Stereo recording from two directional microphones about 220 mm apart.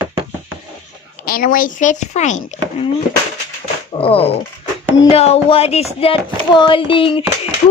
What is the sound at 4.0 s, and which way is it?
Speech, 25° left (ahead or behind).